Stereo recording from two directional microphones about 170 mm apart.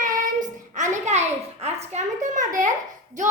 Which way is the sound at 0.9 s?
40° right (ahead or behind).